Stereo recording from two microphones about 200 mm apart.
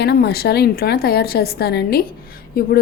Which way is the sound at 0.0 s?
55° left (ahead or behind).